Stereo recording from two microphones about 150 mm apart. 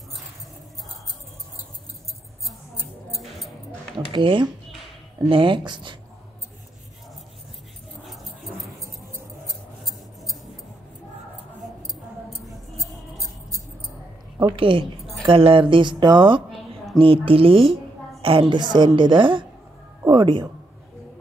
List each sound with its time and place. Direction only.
3.2 s music: centre (ahead or behind)
4.1 s a woman's voice: 30° right (ahead or behind)
8.0 s dog: centre (ahead or behind)
14.5 s a woman's voice: 35° right (ahead or behind)
16.4 s a sound: centre (ahead or behind)
17.0 s a woman's voice: 35° right (ahead or behind)